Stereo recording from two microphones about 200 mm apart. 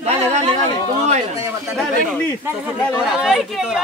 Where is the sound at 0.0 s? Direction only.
35° right (ahead or behind).